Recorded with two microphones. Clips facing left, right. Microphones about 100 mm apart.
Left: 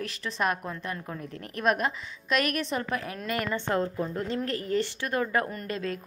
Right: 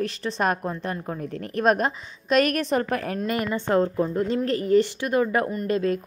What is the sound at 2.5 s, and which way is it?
Speech, 55° right (ahead or behind).